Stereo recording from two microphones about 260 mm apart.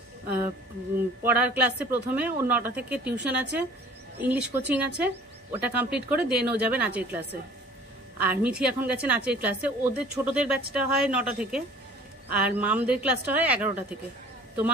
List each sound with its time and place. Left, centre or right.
1.2 s speech: centre